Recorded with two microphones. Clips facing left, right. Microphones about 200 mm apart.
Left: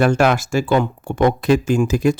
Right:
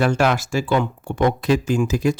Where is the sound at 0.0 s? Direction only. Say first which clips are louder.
Left 3 dB; 50° left (ahead or behind).